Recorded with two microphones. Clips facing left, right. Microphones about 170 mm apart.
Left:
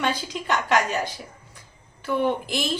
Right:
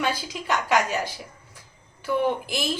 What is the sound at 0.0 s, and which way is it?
A woman's voice, 10° right (ahead or behind).